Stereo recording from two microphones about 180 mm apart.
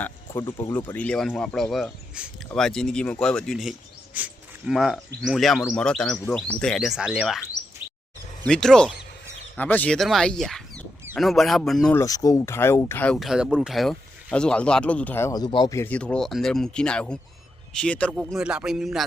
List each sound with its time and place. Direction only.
0.0 s speech: 10° left (ahead or behind)
8.4 s speech: 5° left (ahead or behind)
11.9 s speech: 20° left (ahead or behind); by 19.0 s centre (ahead or behind)